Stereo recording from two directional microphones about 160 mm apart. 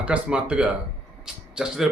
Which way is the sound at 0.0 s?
5° right (ahead or behind).